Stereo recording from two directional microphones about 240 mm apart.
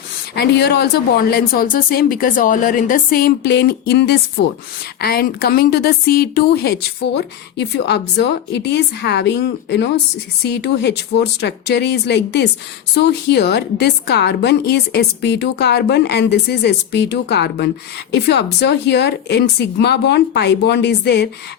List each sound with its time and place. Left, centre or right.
0.3 s a woman's voice: left